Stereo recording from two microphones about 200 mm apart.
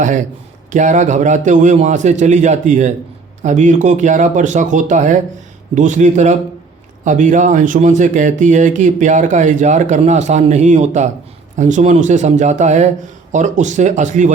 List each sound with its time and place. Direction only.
0.7 s speech: 40° right (ahead or behind)